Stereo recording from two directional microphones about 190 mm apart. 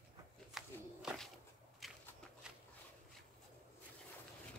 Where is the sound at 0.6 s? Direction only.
Centre (ahead or behind).